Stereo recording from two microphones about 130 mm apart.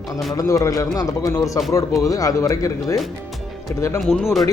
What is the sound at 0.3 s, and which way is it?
Speech, 25° left (ahead or behind).